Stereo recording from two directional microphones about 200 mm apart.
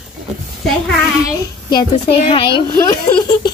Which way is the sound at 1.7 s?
25° left (ahead or behind).